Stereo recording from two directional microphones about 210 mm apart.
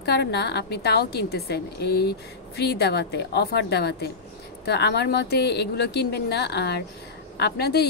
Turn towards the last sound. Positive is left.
turn(degrees=50)  # may be behind; listen again after turning